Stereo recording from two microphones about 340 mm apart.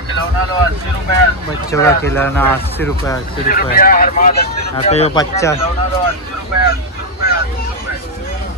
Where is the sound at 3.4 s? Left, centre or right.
Left.